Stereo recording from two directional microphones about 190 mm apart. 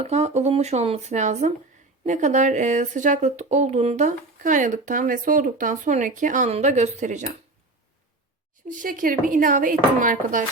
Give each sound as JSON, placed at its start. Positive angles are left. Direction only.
{"t": 0.0, "sound": "speech", "side_deg": -35}
{"t": 8.7, "sound": "speech", "side_deg": -45}